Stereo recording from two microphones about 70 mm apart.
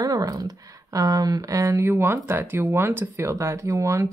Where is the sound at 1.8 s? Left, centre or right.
Right.